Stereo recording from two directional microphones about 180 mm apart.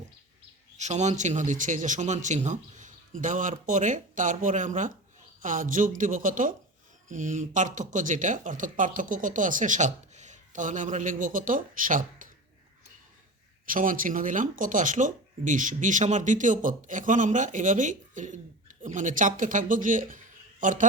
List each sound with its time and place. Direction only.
0.8 s speech: 40° right (ahead or behind)
13.7 s a man's voice: 50° right (ahead or behind)